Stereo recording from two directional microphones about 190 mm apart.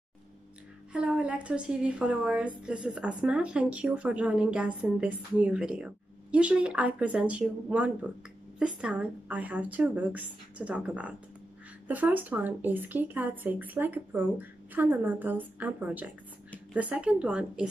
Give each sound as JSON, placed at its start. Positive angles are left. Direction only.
{"t": 0.9, "sound": "a woman's voice", "side_deg": -5}